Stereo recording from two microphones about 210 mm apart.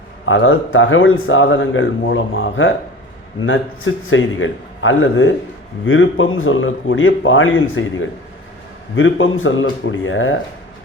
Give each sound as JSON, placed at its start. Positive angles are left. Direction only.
{"t": 0.3, "sound": "speech", "side_deg": 70}
{"t": 9.0, "sound": "speech", "side_deg": 70}